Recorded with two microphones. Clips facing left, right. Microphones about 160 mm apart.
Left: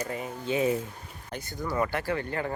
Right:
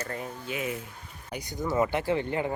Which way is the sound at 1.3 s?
15° right (ahead or behind).